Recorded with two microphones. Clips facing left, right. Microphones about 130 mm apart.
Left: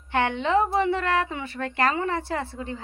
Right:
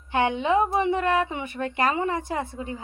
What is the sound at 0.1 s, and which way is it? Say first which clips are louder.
A woman's voice: right 1 dB; 15° right (ahead or behind).